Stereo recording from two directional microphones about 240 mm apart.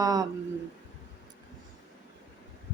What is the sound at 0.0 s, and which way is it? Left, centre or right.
Speech, centre.